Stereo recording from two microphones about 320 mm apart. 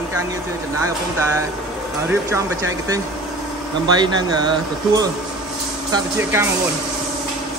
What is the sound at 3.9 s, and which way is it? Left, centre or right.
Speech, centre.